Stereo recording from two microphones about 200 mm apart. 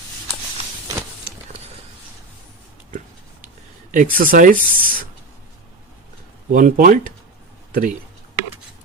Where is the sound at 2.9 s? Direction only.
40° right (ahead or behind).